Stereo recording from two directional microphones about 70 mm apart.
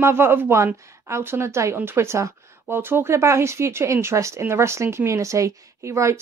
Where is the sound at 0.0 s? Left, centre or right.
Right.